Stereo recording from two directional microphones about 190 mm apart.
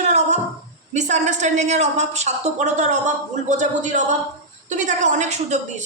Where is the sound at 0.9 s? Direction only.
40° right (ahead or behind).